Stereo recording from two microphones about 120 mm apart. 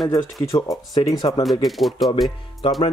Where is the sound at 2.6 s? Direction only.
45° left (ahead or behind).